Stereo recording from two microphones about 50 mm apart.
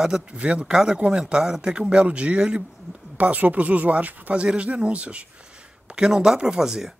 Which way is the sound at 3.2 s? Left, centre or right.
Right.